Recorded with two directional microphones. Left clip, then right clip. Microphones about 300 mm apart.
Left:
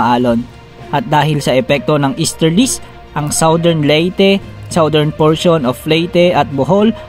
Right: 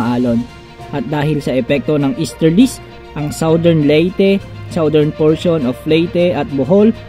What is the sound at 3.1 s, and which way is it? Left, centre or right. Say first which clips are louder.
Speech: left 3 dB; left.